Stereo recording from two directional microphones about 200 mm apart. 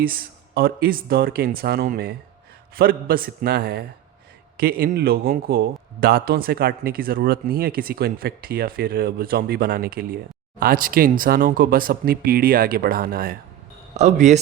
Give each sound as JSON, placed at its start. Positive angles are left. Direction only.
{"t": 0.0, "sound": "speech", "side_deg": -45}
{"t": 13.9, "sound": "speech", "side_deg": -35}